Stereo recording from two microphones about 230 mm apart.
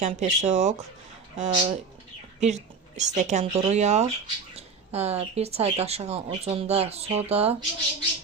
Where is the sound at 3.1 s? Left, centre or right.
Right.